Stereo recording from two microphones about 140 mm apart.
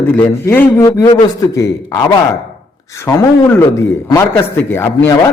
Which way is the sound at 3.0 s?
15° left (ahead or behind).